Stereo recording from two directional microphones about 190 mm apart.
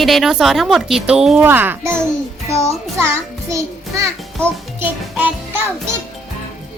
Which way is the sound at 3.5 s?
15° right (ahead or behind).